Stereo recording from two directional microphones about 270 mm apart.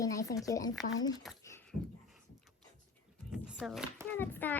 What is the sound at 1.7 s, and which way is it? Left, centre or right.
Speech, right.